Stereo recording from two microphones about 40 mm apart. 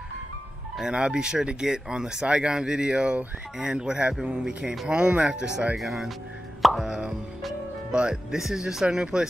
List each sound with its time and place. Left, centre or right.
0.9 s speech: right
5.8 s speech: centre
6.6 s plop: centre
7.9 s speech: right
8.4 s speech: centre